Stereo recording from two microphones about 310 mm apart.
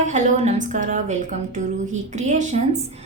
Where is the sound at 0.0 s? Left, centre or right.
Right.